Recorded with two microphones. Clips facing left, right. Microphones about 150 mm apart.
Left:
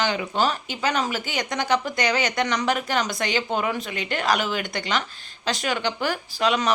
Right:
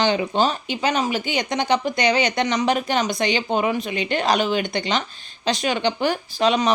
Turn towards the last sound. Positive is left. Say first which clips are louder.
# right 4 dB
turn(degrees=-20)  # may be behind; listen again after turning